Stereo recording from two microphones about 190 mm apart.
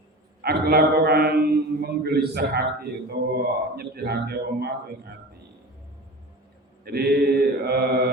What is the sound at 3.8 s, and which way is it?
Mantra, 55° right (ahead or behind).